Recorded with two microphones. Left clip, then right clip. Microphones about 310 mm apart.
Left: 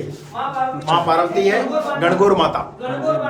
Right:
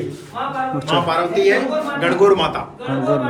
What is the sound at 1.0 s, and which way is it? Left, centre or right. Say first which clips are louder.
A man's voice: right 1 dB; left.